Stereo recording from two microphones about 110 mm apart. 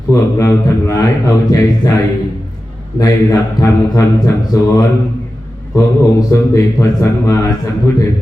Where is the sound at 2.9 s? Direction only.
30° left (ahead or behind).